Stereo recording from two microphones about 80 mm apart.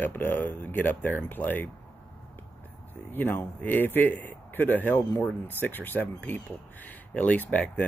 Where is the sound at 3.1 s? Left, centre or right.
Left.